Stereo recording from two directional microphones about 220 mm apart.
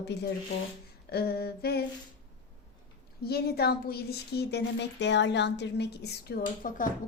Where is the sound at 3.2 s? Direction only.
45° left (ahead or behind).